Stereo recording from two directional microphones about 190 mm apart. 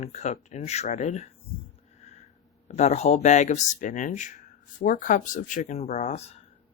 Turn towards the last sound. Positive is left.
turn(degrees=35)  # may be behind; listen again after turning